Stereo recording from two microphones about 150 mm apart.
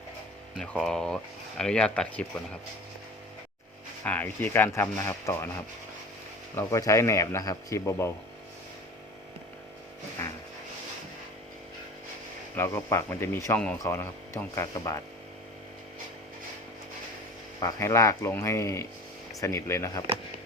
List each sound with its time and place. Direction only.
0.6 s speech: 5° left (ahead or behind)
4.0 s speech: 10° left (ahead or behind)
6.6 s a man's voice: 20° left (ahead or behind)
10.2 s vehicle: 15° left (ahead or behind)
12.5 s speech: 15° left (ahead or behind)
17.6 s a man's voice: 20° left (ahead or behind)